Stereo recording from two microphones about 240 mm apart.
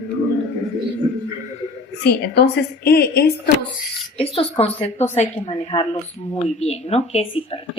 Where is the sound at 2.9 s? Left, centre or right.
Left.